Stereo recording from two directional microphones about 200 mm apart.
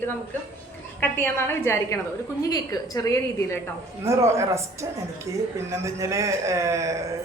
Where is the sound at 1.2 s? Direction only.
10° left (ahead or behind).